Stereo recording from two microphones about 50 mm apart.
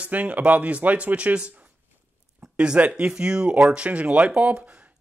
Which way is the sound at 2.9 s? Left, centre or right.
Right.